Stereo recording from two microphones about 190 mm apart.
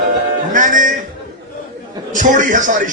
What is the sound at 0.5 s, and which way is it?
Music, 45° right (ahead or behind).